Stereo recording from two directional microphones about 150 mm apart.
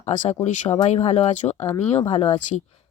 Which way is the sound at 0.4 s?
50° left (ahead or behind).